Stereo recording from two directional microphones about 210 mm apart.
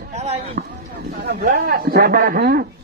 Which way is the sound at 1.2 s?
50° right (ahead or behind).